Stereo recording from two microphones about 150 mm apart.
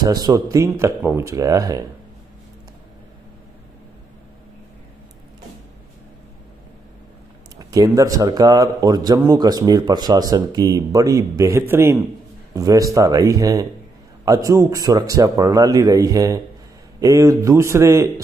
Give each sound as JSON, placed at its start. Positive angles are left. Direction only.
{"t": 0.0, "sound": "a man's voice", "side_deg": -25}
{"t": 7.5, "sound": "a man's voice", "side_deg": -25}